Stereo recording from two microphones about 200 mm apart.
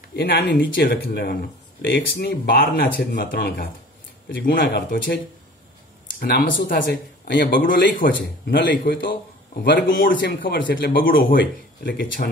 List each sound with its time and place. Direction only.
0.1 s a man's voice: 55° left (ahead or behind)
1.8 s speech: 65° left (ahead or behind)
2.1 s a man's voice: 50° left (ahead or behind)
6.1 s a man's voice: 50° left (ahead or behind)
9.7 s speech: 65° left (ahead or behind)
10.0 s a man's voice: 45° left (ahead or behind)